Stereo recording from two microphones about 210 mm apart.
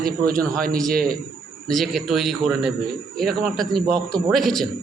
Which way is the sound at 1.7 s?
Centre (ahead or behind).